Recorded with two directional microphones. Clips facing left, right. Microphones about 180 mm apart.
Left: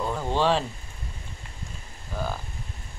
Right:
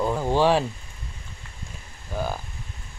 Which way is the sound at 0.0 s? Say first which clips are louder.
Right 4 dB; 10° right (ahead or behind).